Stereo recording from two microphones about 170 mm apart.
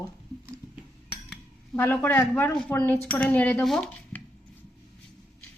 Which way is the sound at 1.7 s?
10° left (ahead or behind).